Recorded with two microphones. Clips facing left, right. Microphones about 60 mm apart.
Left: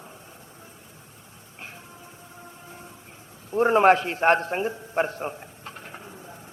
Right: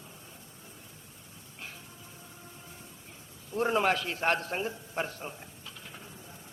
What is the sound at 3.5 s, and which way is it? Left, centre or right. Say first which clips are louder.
Speech: left 9 dB; left.